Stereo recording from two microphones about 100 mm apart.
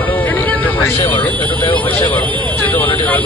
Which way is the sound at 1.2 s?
15° left (ahead or behind).